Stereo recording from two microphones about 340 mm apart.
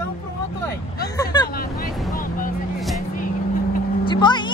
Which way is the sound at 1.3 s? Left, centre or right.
Centre.